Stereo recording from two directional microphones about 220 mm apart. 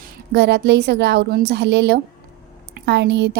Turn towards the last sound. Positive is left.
turn(degrees=-50)  # may be behind; listen again after turning